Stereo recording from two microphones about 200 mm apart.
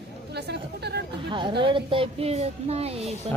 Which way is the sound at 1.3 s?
25° right (ahead or behind).